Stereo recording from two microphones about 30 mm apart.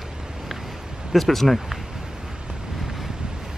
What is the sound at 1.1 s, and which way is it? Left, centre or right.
Speech, centre.